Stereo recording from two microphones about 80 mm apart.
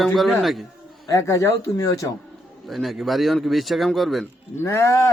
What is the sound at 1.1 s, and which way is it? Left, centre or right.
Speech, left.